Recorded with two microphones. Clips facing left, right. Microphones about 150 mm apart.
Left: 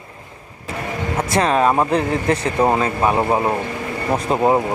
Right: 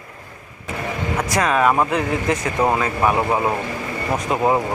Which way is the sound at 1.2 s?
25° left (ahead or behind).